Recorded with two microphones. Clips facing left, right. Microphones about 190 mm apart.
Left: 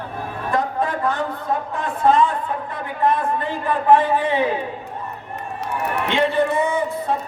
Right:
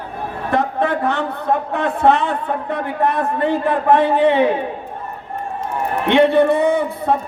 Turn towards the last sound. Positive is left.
turn(degrees=-60)  # may be behind; listen again after turning